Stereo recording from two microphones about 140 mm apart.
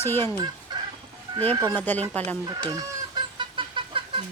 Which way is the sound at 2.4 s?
25° right (ahead or behind).